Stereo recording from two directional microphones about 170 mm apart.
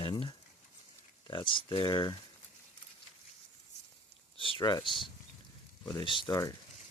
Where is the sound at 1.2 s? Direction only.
25° left (ahead or behind).